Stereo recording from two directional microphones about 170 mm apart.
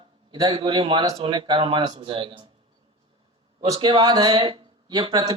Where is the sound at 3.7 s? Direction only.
25° right (ahead or behind).